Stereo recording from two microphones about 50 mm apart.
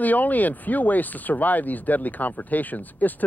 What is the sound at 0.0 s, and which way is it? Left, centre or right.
Speech, left.